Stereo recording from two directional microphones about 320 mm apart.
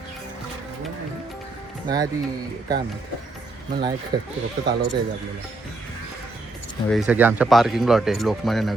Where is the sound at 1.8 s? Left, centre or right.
Centre.